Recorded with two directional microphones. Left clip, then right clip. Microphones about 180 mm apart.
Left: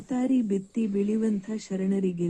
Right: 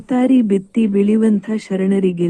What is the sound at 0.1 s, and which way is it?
Speech, 25° right (ahead or behind).